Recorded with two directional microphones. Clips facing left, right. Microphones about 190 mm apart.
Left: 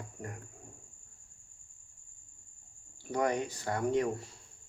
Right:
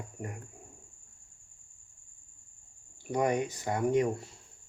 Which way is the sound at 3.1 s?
15° right (ahead or behind).